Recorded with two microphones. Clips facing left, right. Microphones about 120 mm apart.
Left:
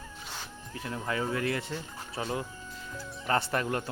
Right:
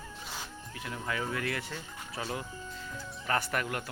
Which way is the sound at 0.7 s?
30° left (ahead or behind).